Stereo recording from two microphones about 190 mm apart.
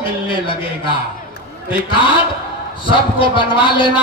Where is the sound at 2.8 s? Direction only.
25° left (ahead or behind).